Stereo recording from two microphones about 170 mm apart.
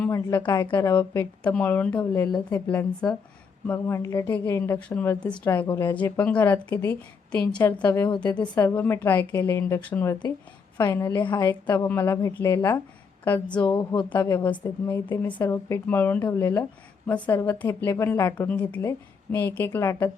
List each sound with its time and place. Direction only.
0.0 s speech: 15° left (ahead or behind)
13.7 s speech: 25° left (ahead or behind)
14.1 s speech: 15° left (ahead or behind)